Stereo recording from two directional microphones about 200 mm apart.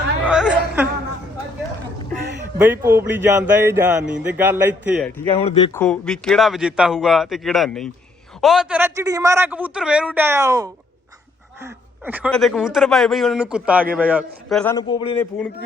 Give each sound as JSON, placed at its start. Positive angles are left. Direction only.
{"t": 0.3, "sound": "a sound", "side_deg": -5}
{"t": 2.6, "sound": "speech", "side_deg": -10}
{"t": 5.3, "sound": "speech", "side_deg": 25}
{"t": 5.7, "sound": "a man's voice", "side_deg": 5}
{"t": 14.6, "sound": "a man's voice", "side_deg": 10}
{"t": 14.8, "sound": "speech", "side_deg": 25}